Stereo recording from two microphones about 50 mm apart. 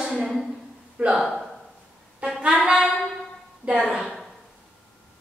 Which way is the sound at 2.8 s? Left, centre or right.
Centre.